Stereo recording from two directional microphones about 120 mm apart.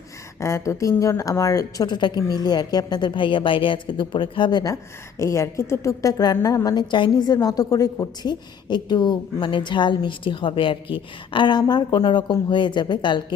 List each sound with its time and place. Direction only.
0.3 s a woman's voice: 25° left (ahead or behind); by 4.6 s 40° left (ahead or behind)
4.6 s a woman's voice: 25° left (ahead or behind)